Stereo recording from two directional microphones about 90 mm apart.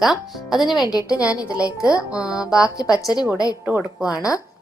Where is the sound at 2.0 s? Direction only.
40° left (ahead or behind).